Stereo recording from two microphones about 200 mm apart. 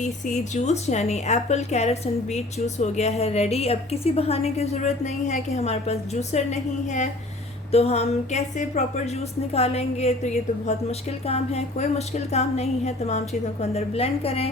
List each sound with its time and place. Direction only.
0.0 s a woman's voice: 35° left (ahead or behind)